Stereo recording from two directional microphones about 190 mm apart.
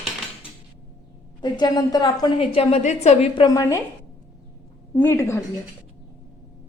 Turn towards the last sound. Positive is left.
turn(degrees=15)  # may be behind; listen again after turning